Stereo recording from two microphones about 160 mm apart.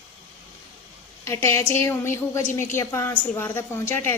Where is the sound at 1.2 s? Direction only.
15° left (ahead or behind).